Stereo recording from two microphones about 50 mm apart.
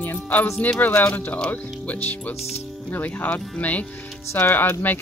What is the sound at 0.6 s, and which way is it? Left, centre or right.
Speech, left.